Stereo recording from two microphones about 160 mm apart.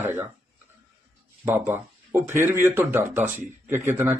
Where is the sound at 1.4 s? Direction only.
15° right (ahead or behind).